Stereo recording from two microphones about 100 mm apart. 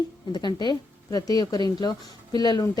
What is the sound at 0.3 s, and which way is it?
A woman's voice, 45° left (ahead or behind).